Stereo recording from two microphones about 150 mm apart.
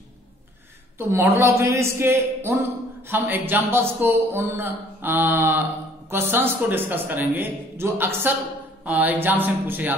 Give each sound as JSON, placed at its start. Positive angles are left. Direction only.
{"t": 0.9, "sound": "speech", "side_deg": -15}